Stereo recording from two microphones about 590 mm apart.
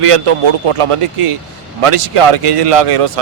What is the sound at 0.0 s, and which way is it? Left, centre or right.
A man's voice, right.